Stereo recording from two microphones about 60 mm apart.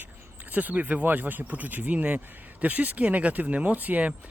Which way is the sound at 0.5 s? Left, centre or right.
Right.